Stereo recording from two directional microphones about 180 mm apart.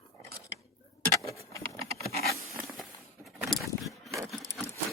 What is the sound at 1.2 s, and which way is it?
Patter, 15° left (ahead or behind).